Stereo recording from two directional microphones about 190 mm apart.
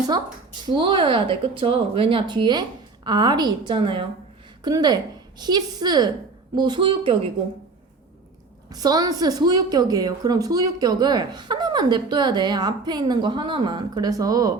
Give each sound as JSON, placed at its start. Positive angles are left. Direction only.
{"t": 0.6, "sound": "a woman's voice", "side_deg": -25}
{"t": 8.7, "sound": "a woman's voice", "side_deg": -20}